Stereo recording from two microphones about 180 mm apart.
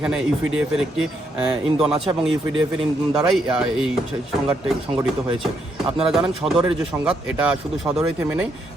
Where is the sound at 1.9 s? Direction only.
30° right (ahead or behind).